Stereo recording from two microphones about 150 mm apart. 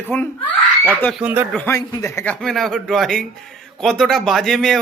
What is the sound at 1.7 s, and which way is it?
A man's voice, 20° left (ahead or behind).